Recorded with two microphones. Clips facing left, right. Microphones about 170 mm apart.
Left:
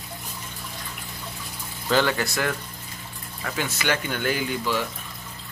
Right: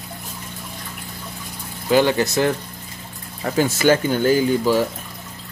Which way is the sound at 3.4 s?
40° right (ahead or behind).